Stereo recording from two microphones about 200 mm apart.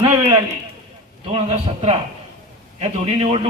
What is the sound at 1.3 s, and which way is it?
A man's voice, 30° right (ahead or behind).